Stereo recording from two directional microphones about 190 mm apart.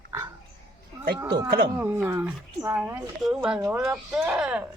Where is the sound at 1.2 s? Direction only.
20° right (ahead or behind).